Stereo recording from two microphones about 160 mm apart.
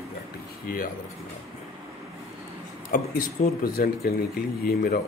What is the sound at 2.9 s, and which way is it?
A man's voice, 60° left (ahead or behind).